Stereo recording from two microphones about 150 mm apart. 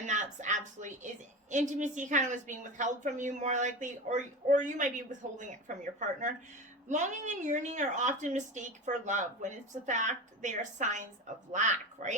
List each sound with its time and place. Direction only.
0.0 s a woman's voice: 55° right (ahead or behind)